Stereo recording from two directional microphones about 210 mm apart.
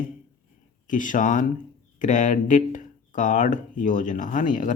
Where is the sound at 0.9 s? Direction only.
40° left (ahead or behind).